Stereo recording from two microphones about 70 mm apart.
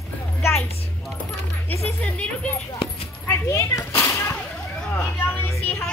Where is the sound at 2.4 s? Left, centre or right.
Centre.